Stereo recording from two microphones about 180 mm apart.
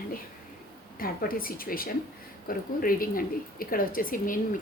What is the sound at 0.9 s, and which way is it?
A woman's voice, 55° left (ahead or behind).